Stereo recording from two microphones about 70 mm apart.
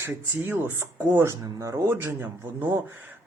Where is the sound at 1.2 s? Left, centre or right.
Right.